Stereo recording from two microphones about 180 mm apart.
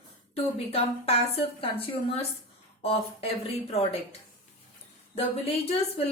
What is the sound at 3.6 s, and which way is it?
Speech, 35° left (ahead or behind).